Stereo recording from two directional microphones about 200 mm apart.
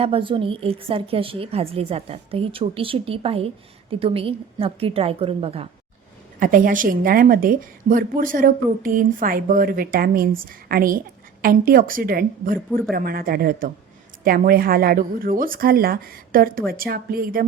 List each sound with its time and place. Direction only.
0.0 s a woman's voice: 25° right (ahead or behind)
6.4 s a woman's voice: 40° right (ahead or behind)